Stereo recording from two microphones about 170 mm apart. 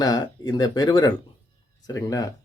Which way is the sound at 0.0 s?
25° left (ahead or behind).